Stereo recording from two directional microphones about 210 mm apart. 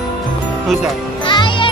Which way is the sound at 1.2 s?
25° left (ahead or behind).